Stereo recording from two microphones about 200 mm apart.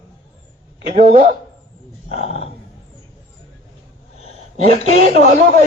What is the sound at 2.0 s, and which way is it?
Speech, 35° right (ahead or behind).